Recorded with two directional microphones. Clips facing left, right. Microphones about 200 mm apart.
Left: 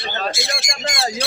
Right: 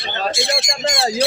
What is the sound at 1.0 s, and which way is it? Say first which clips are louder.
Squawk: right 3 dB; 30° right (ahead or behind).